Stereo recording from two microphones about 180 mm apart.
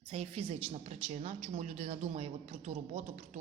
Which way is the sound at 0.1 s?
35° right (ahead or behind).